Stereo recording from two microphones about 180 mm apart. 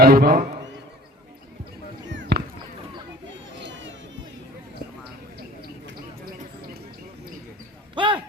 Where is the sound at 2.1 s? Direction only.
75° right (ahead or behind).